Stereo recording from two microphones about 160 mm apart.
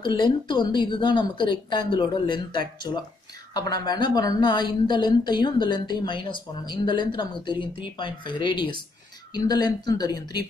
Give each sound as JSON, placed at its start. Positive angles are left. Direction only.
{"t": 0.0, "sound": "a woman's voice", "side_deg": 30}